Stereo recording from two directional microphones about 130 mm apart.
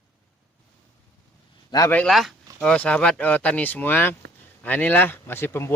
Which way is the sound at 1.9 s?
5° left (ahead or behind).